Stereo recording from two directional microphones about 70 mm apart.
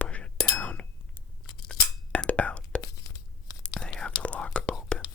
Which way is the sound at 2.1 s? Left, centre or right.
Centre.